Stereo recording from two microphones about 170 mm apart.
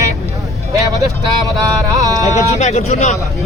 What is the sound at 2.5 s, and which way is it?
Speech, 45° left (ahead or behind).